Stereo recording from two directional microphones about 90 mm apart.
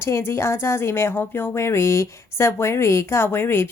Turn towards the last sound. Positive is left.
turn(degrees=25)  # may be behind; listen again after turning